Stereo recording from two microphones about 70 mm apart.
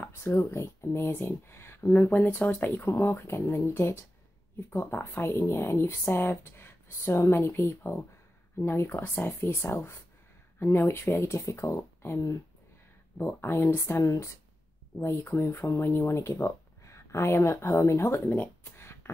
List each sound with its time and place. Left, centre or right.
0.0 s speech: left
14.0 s speech: left
15.0 s speech: left